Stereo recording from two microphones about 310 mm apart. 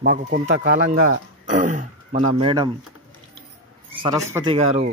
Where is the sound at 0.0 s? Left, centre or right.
Right.